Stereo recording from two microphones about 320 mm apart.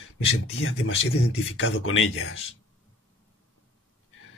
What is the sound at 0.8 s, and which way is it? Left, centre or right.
A man's voice, left.